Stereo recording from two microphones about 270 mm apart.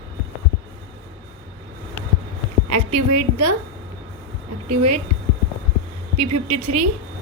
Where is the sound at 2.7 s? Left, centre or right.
Right.